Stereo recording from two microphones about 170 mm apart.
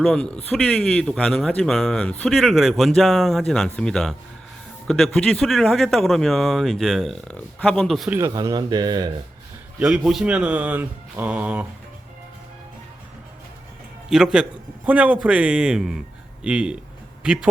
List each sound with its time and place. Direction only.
0.0 s speech: 5° left (ahead or behind)
8.2 s a man's voice: 20° right (ahead or behind)
9.7 s speech: 5° right (ahead or behind)
14.1 s speech: 5° right (ahead or behind)